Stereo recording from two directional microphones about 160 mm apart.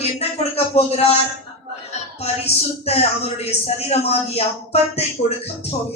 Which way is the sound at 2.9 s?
40° left (ahead or behind).